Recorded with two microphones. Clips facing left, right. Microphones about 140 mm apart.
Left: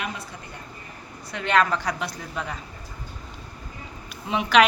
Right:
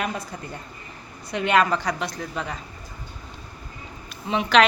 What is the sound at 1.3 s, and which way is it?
Speech, 20° right (ahead or behind).